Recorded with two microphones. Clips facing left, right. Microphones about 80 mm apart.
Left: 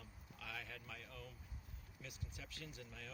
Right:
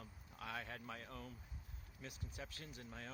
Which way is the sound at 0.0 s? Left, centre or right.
Right.